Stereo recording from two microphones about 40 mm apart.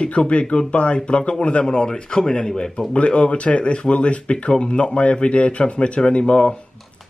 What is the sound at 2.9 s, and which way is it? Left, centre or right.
Speech, left.